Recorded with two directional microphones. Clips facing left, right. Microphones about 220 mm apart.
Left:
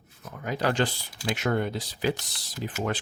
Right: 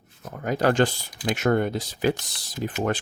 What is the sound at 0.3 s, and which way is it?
Speech, 45° right (ahead or behind).